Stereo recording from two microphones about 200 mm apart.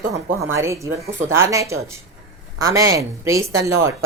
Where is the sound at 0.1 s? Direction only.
15° right (ahead or behind).